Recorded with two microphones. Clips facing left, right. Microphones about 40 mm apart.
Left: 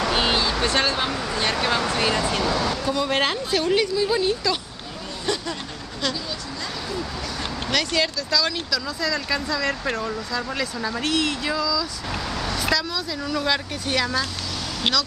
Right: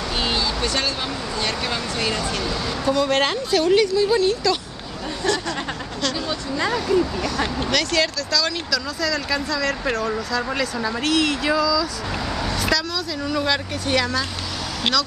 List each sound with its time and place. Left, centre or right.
0.1 s a sound: centre
0.7 s speech: left
2.2 s speech: left
2.8 s speech: centre
6.6 s speech: right
7.7 s speech: centre
12.5 s vehicle: centre
13.2 s speech: centre